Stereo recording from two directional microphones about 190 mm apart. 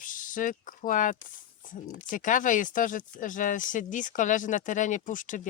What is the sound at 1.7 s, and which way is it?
Speech, 45° left (ahead or behind).